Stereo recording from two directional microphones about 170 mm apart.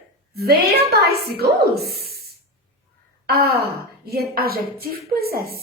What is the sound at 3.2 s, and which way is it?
A woman's voice, 70° right (ahead or behind).